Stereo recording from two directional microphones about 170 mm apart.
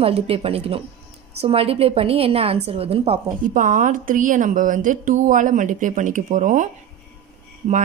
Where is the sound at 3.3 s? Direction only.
50° right (ahead or behind).